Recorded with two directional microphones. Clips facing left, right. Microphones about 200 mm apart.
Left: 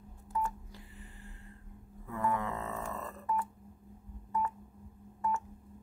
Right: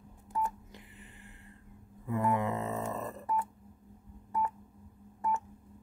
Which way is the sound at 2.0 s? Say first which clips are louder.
Right 4 dB; 20° right (ahead or behind).